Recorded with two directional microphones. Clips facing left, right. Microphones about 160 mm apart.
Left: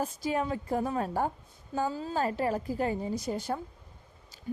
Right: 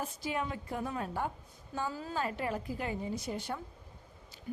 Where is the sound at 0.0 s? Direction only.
40° left (ahead or behind).